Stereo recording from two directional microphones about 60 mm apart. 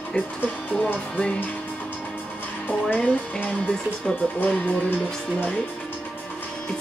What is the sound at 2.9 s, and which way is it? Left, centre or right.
Speech, left.